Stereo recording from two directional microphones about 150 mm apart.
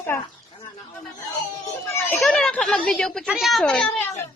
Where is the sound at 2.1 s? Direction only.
5° left (ahead or behind).